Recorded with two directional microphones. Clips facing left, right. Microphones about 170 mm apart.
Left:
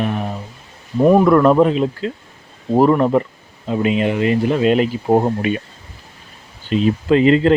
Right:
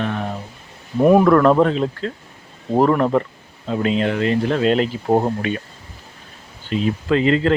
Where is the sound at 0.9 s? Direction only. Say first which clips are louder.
Left 1 dB; 5° right (ahead or behind).